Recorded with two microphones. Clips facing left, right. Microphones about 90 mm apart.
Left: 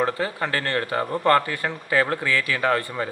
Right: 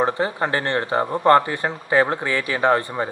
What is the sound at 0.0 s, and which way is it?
Speech, 20° right (ahead or behind).